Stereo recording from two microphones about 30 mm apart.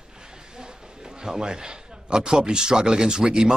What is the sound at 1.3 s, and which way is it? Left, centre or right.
Speech, right.